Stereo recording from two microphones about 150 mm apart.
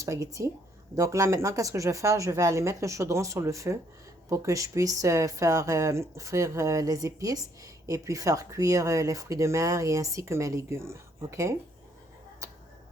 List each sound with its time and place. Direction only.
0.0 s speech: 20° right (ahead or behind)